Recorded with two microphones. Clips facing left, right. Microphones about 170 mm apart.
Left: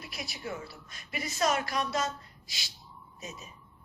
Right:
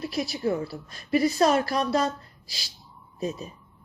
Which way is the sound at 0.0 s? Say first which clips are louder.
Right 13 dB; 35° right (ahead or behind).